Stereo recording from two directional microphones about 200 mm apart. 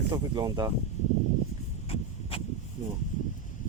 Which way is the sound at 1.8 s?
30° left (ahead or behind).